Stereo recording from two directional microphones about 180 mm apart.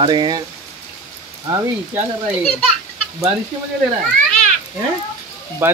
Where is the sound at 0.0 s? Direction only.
25° right (ahead or behind).